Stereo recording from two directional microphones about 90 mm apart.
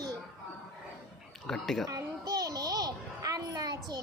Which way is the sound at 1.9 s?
45° right (ahead or behind).